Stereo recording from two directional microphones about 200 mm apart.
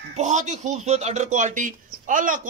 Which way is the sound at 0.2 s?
35° right (ahead or behind).